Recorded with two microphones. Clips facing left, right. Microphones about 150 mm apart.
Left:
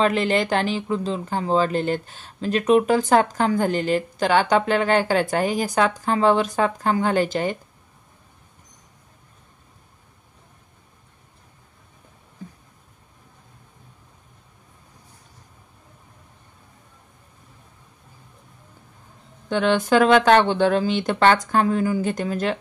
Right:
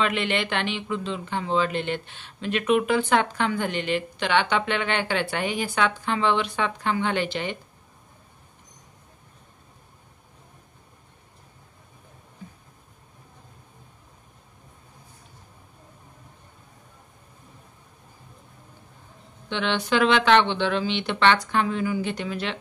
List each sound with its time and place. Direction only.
0.0 s speech: 40° left (ahead or behind)
19.5 s speech: 45° left (ahead or behind)